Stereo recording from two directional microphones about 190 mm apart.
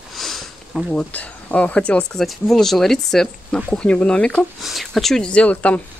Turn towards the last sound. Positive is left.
turn(degrees=5)  # may be behind; listen again after turning